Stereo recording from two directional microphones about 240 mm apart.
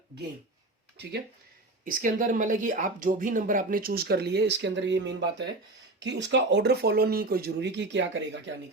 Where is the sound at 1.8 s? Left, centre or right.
Right.